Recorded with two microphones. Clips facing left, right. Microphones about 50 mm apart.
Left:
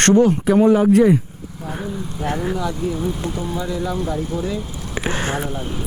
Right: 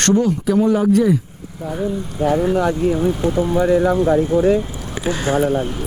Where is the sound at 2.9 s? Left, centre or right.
Right.